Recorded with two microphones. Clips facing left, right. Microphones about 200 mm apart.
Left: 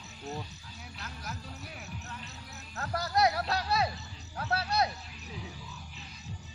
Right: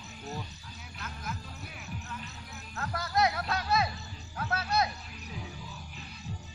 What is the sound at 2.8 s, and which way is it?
Speech, 35° left (ahead or behind).